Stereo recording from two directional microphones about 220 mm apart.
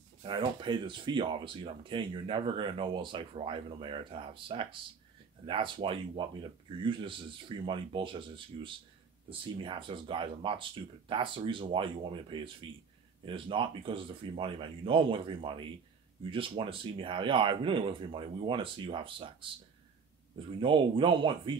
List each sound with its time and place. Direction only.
0.2 s speech: 20° right (ahead or behind)
20.5 s speech: 20° right (ahead or behind)